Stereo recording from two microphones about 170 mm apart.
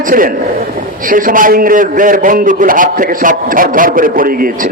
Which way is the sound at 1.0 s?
55° right (ahead or behind).